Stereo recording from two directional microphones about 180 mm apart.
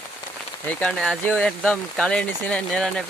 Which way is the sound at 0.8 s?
5° left (ahead or behind).